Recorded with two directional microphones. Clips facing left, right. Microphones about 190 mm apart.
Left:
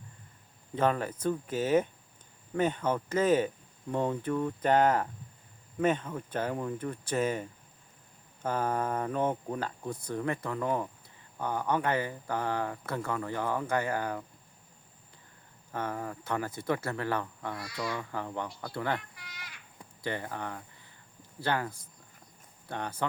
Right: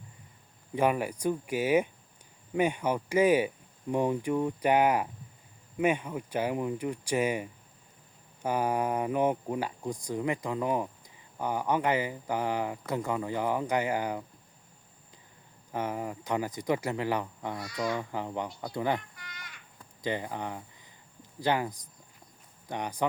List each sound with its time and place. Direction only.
0.8 s speech: 10° right (ahead or behind)
15.7 s speech: 15° right (ahead or behind)
17.6 s speech: centre (ahead or behind)
17.9 s speech: 15° right (ahead or behind)
18.9 s a sound: centre (ahead or behind)
20.0 s speech: 15° right (ahead or behind)